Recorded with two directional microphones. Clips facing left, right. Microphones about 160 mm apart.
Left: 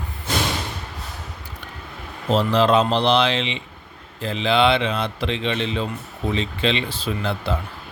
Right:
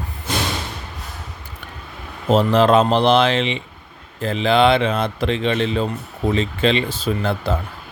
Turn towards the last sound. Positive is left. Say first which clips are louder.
# right 4 dB
turn(degrees=-45)  # may be behind; listen again after turning